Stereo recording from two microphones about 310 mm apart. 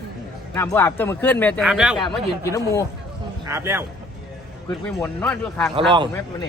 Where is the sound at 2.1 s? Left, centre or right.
Centre.